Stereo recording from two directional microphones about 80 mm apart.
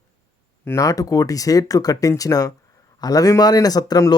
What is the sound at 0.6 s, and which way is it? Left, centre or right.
Speech, left.